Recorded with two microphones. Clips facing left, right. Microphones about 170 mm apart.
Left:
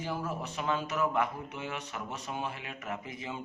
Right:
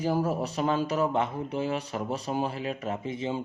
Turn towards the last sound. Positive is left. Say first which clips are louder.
# right 8 dB
turn(degrees=-30)  # may be behind; listen again after turning